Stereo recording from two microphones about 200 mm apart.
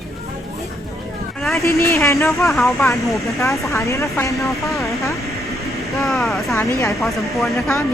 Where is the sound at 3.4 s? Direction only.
15° left (ahead or behind).